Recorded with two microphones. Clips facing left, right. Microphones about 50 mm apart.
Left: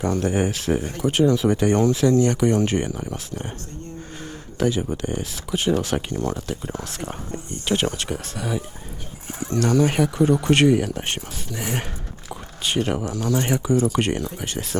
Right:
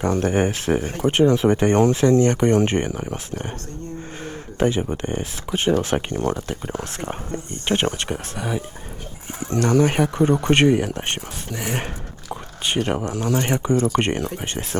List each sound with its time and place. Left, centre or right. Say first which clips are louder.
0.0 s speech: right 2 dB; right
4.2 s a sound: right 2 dB; right
5.2 s speech: right 2 dB; right
7.3 s speech: right 1 dB; right
8.1 s speech: right 1 dB; centre
9.2 s speech: right 1 dB; right
12.3 s a sound: right 1 dB; right
13.1 s speech: right 1 dB; right